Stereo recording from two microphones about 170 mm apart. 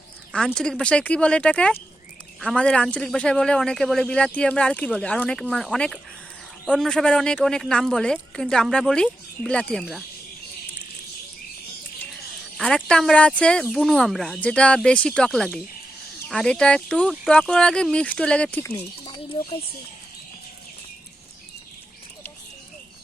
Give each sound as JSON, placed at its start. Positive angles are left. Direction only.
{"t": 0.3, "sound": "a man's voice", "side_deg": 5}
{"t": 12.5, "sound": "a man's voice", "side_deg": 5}
{"t": 19.0, "sound": "speech", "side_deg": 30}